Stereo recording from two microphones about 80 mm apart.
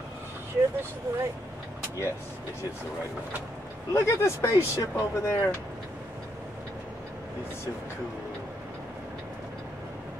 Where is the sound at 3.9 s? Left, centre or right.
Left.